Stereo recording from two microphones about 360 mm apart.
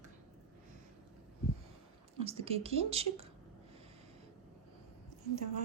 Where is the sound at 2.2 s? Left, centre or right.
Centre.